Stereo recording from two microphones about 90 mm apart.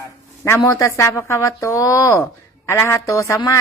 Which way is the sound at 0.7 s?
35° left (ahead or behind).